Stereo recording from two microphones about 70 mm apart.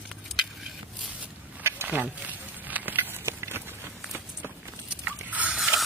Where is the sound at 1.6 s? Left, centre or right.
Right.